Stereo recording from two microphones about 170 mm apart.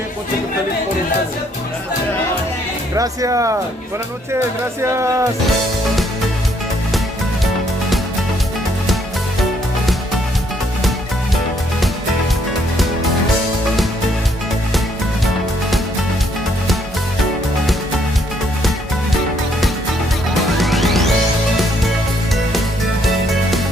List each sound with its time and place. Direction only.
2.9 s speech: 20° right (ahead or behind)
4.8 s speech: 15° right (ahead or behind)
20.6 s music: centre (ahead or behind)